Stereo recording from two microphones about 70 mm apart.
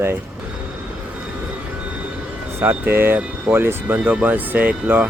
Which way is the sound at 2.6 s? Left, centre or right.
Right.